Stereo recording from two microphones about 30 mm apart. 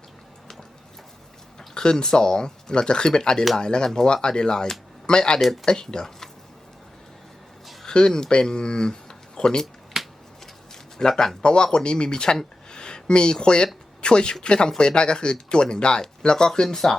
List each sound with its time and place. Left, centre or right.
1.5 s speech: left
7.9 s speech: left
10.0 s finger snapping: centre
11.0 s speech: left
12.7 s a sound: left
14.0 s speech: left